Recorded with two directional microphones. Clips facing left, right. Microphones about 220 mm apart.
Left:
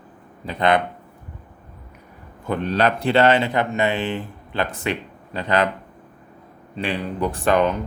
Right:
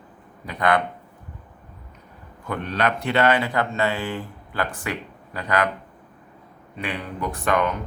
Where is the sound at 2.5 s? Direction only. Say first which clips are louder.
Left 4 dB; 30° left (ahead or behind).